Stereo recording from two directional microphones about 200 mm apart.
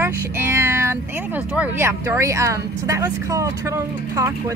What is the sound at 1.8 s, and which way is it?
Speech, 15° right (ahead or behind).